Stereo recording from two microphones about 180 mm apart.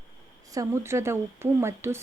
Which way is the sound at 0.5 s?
15° right (ahead or behind).